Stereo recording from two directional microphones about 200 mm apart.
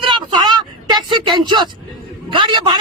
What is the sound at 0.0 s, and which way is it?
Vehicle, 25° right (ahead or behind).